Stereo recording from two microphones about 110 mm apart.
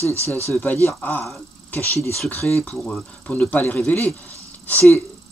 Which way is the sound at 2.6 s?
5° left (ahead or behind).